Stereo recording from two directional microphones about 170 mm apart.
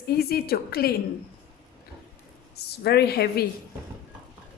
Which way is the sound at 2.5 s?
70° left (ahead or behind).